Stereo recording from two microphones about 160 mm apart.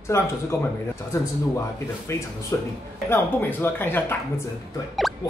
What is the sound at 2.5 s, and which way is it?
A man's voice, 15° left (ahead or behind).